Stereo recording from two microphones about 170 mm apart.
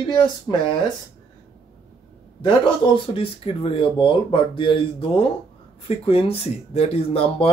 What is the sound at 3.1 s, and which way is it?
Speech, 35° left (ahead or behind).